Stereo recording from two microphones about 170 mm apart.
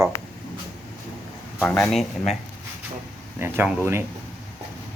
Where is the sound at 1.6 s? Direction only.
5° left (ahead or behind).